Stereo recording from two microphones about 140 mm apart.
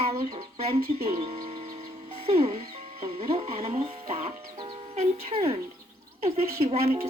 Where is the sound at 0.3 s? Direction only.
45° right (ahead or behind).